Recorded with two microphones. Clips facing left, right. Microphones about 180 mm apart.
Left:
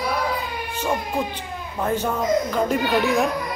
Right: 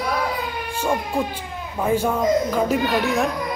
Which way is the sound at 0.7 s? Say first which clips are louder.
Right 2 dB; 10° right (ahead or behind).